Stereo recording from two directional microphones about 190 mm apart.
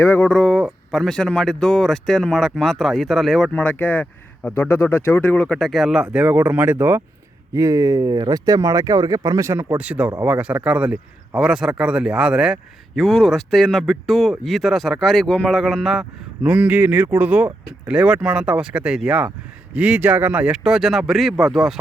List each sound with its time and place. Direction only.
0.0 s speech: 10° left (ahead or behind)